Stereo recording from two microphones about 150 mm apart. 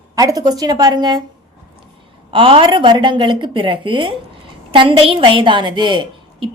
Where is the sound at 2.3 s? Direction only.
35° right (ahead or behind).